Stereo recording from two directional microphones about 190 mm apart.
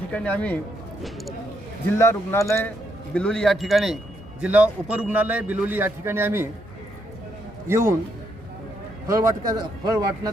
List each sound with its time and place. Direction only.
0.1 s speech: 5° left (ahead or behind)
2.0 s a man's voice: 15° left (ahead or behind); by 6.5 s 10° right (ahead or behind)
7.7 s a man's voice: 15° right (ahead or behind)
9.0 s speech: 20° right (ahead or behind)